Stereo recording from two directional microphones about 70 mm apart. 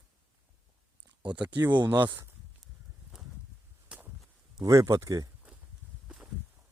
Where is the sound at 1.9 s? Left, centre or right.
Right.